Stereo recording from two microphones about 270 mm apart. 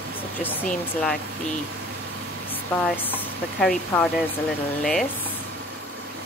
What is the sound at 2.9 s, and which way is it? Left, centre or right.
Speech, centre.